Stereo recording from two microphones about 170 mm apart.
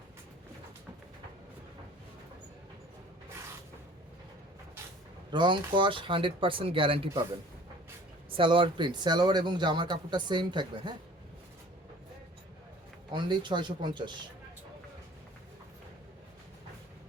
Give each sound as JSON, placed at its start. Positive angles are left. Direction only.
{"t": 5.3, "sound": "speech", "side_deg": -30}
{"t": 8.3, "sound": "speech", "side_deg": -30}
{"t": 13.1, "sound": "speech", "side_deg": -25}